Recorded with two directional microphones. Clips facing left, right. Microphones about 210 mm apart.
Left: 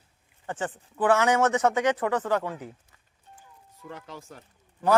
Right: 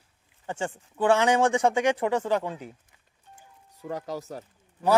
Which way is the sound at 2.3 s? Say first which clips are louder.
Even; 25° right (ahead or behind).